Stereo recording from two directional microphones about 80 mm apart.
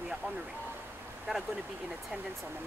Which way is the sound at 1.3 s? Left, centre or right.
Centre.